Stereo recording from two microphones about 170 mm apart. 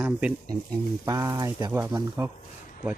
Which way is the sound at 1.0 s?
20° right (ahead or behind).